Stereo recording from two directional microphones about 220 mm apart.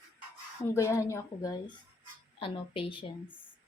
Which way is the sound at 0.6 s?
10° left (ahead or behind).